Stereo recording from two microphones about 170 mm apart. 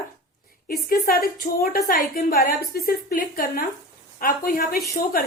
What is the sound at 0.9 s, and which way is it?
A woman's voice, 60° left (ahead or behind).